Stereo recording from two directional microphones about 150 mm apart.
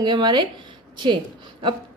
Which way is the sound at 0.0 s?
30° right (ahead or behind).